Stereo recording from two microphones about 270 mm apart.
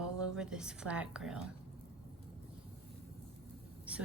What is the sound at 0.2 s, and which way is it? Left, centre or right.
A woman's voice, centre.